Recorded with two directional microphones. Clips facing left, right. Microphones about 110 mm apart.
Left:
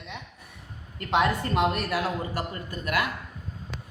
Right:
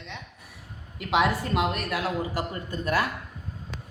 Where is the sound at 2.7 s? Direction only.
30° right (ahead or behind).